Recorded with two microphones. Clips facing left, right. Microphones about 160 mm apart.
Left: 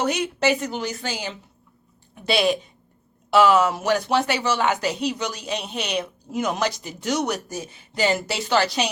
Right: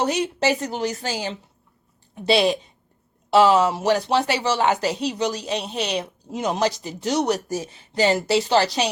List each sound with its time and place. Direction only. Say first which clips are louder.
0.0 s speech: right 1 dB; 35° right (ahead or behind)